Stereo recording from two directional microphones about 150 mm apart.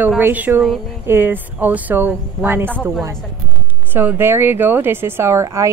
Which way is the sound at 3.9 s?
15° right (ahead or behind).